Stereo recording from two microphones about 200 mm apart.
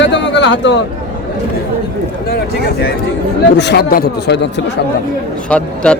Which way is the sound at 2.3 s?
55° left (ahead or behind).